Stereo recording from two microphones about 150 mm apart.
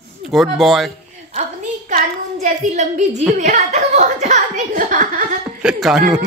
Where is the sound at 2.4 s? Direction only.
50° right (ahead or behind).